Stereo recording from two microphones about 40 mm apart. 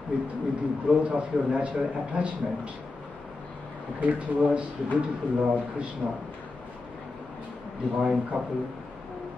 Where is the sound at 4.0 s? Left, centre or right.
Right.